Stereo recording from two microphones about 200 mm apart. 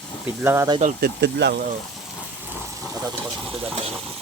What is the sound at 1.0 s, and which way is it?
Speech, 55° right (ahead or behind).